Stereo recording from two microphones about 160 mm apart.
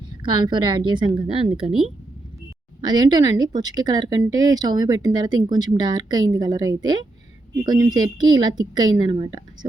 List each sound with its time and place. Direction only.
0.2 s speech: 25° right (ahead or behind)
2.8 s speech: 25° right (ahead or behind)